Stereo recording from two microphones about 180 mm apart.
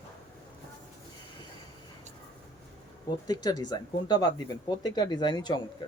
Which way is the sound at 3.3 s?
20° left (ahead or behind).